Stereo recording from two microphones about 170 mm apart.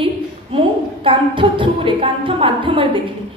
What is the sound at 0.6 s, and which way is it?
A woman's voice, 30° right (ahead or behind).